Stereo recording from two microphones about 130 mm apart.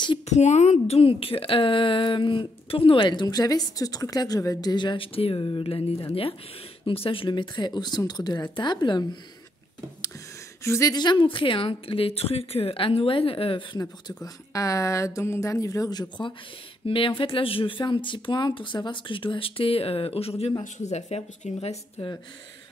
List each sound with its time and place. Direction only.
0.3 s a woman's voice: 60° left (ahead or behind); by 9.0 s 35° left (ahead or behind)
10.6 s a woman's voice: 20° left (ahead or behind); by 13.7 s 45° left (ahead or behind)
13.7 s a woman's voice: 30° left (ahead or behind); by 20.5 s 50° left (ahead or behind)
20.6 s a woman's voice: 65° left (ahead or behind)